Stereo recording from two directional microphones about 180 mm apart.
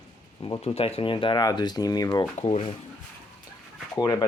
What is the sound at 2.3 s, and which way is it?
Speech, 40° left (ahead or behind).